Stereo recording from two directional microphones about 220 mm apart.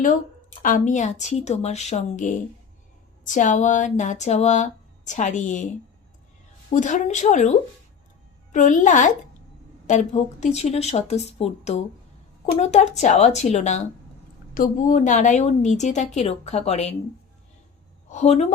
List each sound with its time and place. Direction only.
0.6 s speech: 35° left (ahead or behind)
6.7 s speech: 35° left (ahead or behind)
8.5 s speech: 35° left (ahead or behind)
18.1 s speech: 30° left (ahead or behind)